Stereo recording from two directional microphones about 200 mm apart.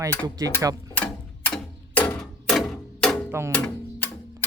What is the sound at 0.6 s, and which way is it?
Speech, 15° right (ahead or behind).